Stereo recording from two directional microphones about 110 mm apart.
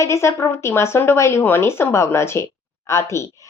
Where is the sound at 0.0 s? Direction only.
25° left (ahead or behind).